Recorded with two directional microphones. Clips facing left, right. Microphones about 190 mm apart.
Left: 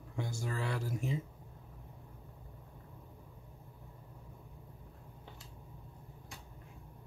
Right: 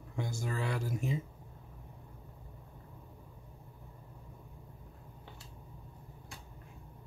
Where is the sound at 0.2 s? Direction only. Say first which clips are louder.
Right 2 dB; 15° right (ahead or behind).